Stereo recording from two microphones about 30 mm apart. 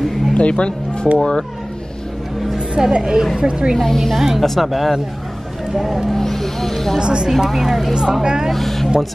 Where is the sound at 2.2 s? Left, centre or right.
Centre.